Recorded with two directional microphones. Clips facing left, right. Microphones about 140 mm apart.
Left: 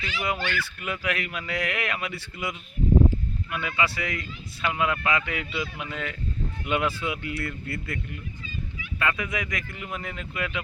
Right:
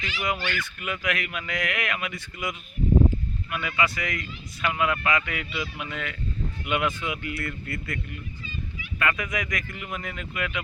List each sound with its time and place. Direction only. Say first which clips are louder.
0.0 s a man's voice: even; 30° left (ahead or behind)
9.1 s speech: even; 25° left (ahead or behind)